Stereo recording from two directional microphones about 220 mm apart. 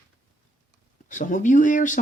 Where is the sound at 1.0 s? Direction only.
35° left (ahead or behind).